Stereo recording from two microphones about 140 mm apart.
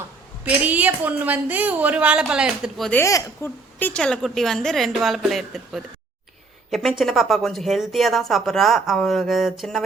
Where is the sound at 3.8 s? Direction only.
10° left (ahead or behind).